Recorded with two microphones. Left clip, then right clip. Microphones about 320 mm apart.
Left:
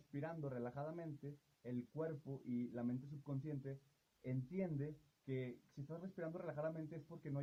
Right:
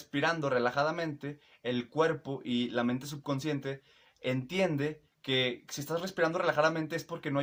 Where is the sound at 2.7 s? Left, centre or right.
Left.